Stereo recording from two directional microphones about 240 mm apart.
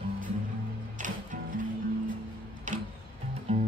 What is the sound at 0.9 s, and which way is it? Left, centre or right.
Music, right.